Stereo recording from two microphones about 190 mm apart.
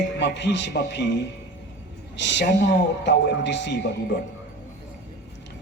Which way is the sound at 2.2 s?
70° left (ahead or behind).